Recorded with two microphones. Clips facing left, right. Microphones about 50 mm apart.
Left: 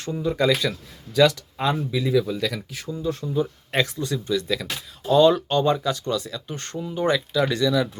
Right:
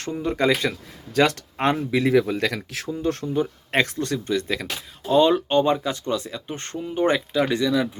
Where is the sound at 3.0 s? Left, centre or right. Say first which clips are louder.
Right 1 dB; right.